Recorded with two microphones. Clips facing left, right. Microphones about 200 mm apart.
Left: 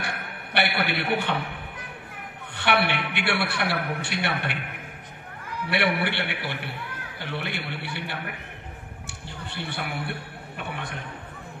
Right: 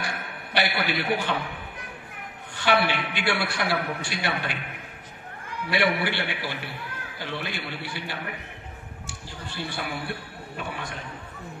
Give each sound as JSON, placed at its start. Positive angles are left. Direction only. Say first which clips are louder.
{"t": 0.0, "sound": "a sound", "louder": "even", "side_deg": 60}
{"t": 2.5, "sound": "a woman's voice", "louder": "right 1 dB", "side_deg": 60}
{"t": 5.7, "sound": "a woman's voice", "louder": "right 1 dB", "side_deg": 60}
{"t": 9.4, "sound": "a woman's voice", "louder": "even", "side_deg": 60}